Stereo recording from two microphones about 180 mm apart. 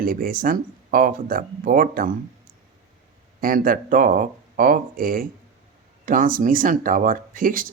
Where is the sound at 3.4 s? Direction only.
50° right (ahead or behind).